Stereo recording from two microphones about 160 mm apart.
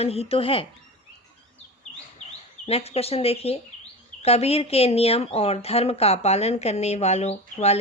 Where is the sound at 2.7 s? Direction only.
40° left (ahead or behind).